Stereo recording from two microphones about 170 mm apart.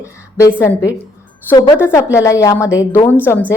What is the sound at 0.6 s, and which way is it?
Speech, 15° left (ahead or behind).